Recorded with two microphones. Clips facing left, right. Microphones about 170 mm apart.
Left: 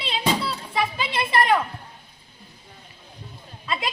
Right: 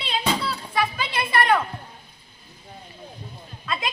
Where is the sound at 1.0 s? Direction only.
25° left (ahead or behind).